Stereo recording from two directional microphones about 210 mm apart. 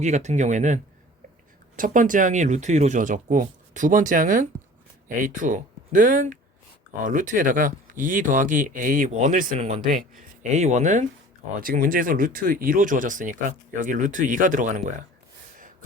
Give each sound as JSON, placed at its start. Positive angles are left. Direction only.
{"t": 0.0, "sound": "speech", "side_deg": -35}